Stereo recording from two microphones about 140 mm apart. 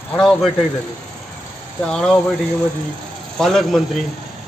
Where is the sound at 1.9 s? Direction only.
5° left (ahead or behind).